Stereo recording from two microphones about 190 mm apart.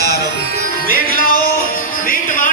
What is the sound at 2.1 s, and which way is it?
Music, 45° left (ahead or behind).